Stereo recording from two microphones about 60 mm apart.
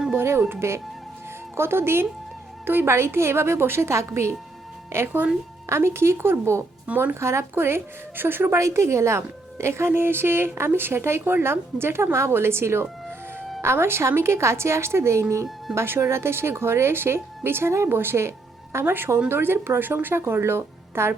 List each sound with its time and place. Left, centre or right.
0.1 s a woman's voice: right
6.8 s speech: right
7.1 s speech: right
8.5 s a woman's voice: right